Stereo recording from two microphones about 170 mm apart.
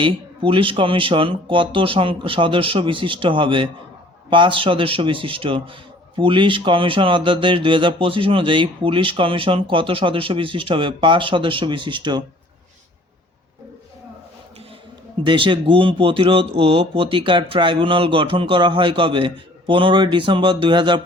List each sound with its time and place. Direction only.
0.0 s speech: 30° right (ahead or behind)
15.2 s speech: 30° right (ahead or behind)